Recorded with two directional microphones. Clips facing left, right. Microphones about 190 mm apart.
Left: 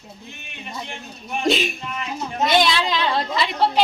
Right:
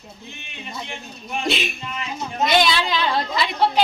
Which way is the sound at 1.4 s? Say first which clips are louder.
Left 4 dB; 45° left (ahead or behind).